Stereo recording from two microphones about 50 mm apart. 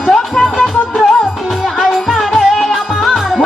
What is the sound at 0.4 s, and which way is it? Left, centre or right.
Music, centre.